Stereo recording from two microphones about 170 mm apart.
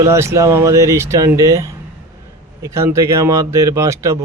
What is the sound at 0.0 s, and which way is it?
A man's voice, 15° right (ahead or behind).